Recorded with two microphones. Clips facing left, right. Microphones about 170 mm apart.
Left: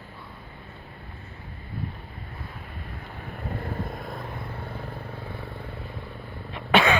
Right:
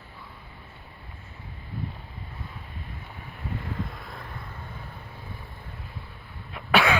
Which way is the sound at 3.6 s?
50° left (ahead or behind).